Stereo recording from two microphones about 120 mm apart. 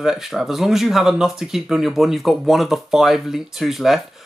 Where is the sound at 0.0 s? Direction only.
5° right (ahead or behind).